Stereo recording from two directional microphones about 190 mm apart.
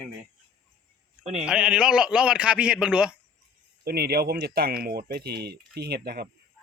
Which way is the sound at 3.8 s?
55° right (ahead or behind).